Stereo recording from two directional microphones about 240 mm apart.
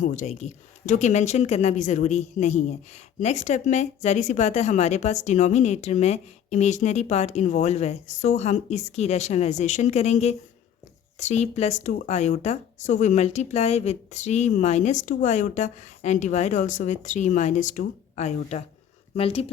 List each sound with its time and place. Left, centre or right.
0.0 s speech: left